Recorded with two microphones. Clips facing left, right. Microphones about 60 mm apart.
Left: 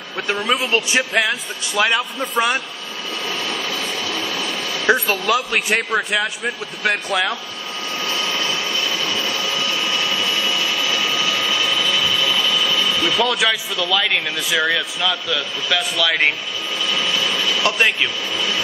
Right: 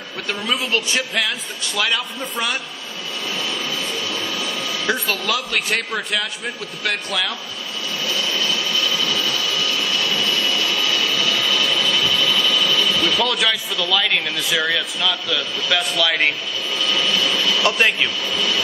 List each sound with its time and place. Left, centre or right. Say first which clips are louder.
0.5 s a man's voice: left 1 dB; centre
5.0 s a man's voice: left 4 dB; centre
8.0 s vehicle: even; left
11.8 s ratchet: even; centre
13.0 s a man's voice: left 1 dB; centre
16.8 s a sound: right 1 dB; centre